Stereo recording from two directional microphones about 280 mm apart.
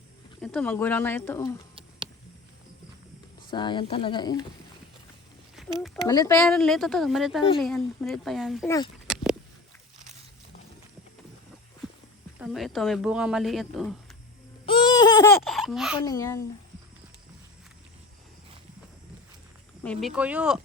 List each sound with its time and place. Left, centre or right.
0.4 s speech: centre
3.5 s speech: centre
5.6 s a sound: centre
6.1 s speech: centre
8.6 s speech: centre
9.1 s a sound: centre
11.8 s a sound: centre
12.4 s speech: centre
14.7 s babbling: centre
15.4 s baby laughter: centre
16.0 s speech: centre
19.8 s speech: centre